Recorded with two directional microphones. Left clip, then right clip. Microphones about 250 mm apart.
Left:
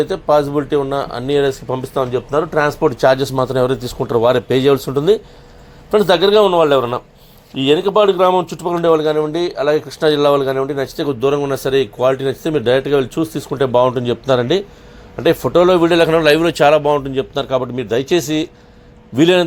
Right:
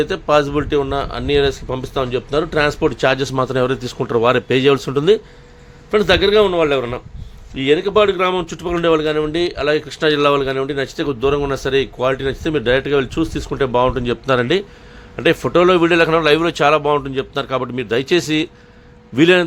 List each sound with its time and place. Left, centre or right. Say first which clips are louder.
0.0 s speech: left 1 dB; centre
2.3 s speech: left 1 dB; right
2.9 s a man's voice: left 3 dB; centre